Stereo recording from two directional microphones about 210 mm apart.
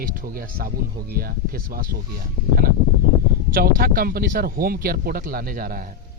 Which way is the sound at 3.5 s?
45° right (ahead or behind).